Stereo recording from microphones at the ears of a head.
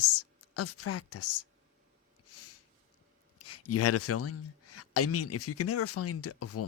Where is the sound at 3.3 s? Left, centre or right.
Left.